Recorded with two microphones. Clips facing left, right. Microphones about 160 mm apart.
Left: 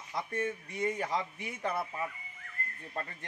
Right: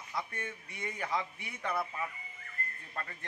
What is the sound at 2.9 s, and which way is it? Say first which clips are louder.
Speech: left 4 dB; 25° left (ahead or behind).